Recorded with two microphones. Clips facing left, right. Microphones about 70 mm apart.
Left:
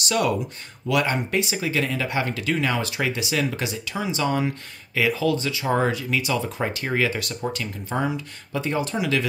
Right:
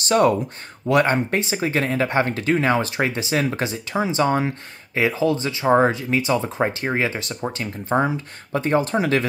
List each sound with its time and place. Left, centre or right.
0.0 s speech: right